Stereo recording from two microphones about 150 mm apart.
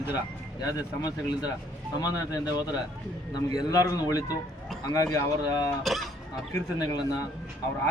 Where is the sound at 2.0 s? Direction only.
25° left (ahead or behind).